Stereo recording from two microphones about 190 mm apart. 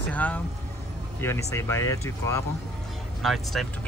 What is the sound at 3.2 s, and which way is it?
Speech, centre (ahead or behind).